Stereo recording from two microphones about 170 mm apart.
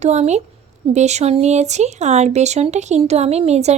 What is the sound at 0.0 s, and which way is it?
Speech, 40° right (ahead or behind).